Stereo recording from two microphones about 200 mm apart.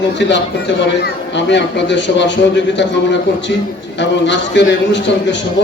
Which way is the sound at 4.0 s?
65° left (ahead or behind).